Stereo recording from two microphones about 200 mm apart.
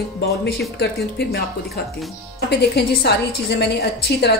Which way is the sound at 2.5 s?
55° left (ahead or behind).